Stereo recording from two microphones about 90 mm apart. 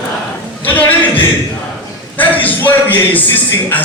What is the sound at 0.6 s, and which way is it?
Speech, 20° left (ahead or behind).